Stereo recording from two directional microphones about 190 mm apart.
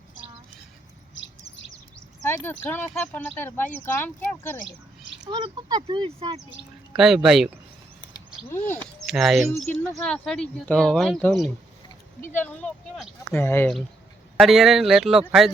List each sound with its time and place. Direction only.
2.2 s speech: 10° left (ahead or behind)
5.3 s speech: 20° right (ahead or behind)
6.9 s speech: centre (ahead or behind)
8.4 s speech: 10° left (ahead or behind)
9.0 s speech: centre (ahead or behind)
14.3 s speech: centre (ahead or behind)